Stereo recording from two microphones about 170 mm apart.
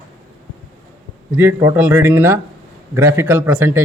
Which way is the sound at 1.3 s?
10° right (ahead or behind).